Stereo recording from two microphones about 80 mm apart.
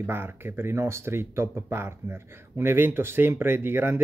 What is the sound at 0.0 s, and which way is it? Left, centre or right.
Speech, right.